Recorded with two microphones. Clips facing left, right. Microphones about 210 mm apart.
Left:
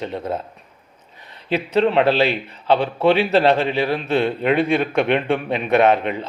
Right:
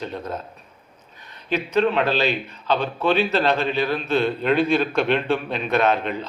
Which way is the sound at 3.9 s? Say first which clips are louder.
Left 2 dB; 70° left (ahead or behind).